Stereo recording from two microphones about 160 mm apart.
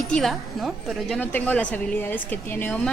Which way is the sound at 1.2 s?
10° left (ahead or behind).